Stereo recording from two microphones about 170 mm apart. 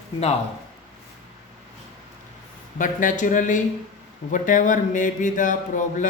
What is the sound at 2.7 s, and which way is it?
Speech, 50° left (ahead or behind).